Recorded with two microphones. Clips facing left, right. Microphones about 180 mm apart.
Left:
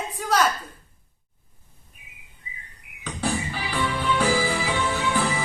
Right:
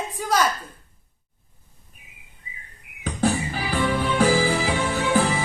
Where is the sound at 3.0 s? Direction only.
45° right (ahead or behind).